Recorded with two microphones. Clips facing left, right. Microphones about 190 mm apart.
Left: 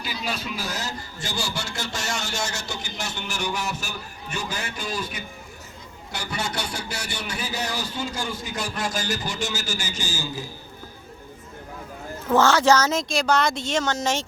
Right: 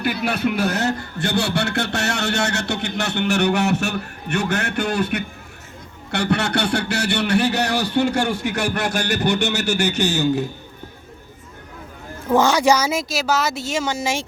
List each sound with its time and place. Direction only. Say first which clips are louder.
0.0 s a man's voice: right 10 dB; 60° right (ahead or behind)
12.3 s speech: right 2 dB; 15° right (ahead or behind)